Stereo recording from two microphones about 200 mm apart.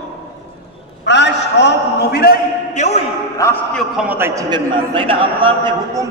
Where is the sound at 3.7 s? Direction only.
5° right (ahead or behind).